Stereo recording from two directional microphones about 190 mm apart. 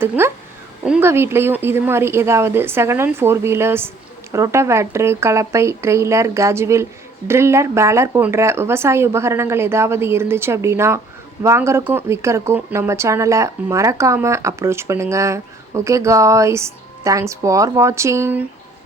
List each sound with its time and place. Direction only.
0.2 s speech: 10° right (ahead or behind)